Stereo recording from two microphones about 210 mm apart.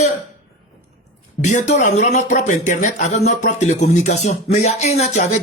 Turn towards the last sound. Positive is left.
turn(degrees=35)  # may be behind; listen again after turning